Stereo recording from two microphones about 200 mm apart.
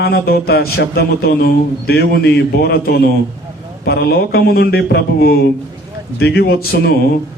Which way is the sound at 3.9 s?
50° left (ahead or behind).